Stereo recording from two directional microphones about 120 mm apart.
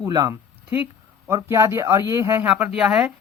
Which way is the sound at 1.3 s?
25° right (ahead or behind).